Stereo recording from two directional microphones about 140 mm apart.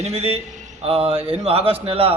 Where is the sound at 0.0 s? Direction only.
45° right (ahead or behind).